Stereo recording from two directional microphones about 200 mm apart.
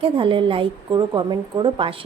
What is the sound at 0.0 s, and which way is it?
A woman's voice, 25° right (ahead or behind).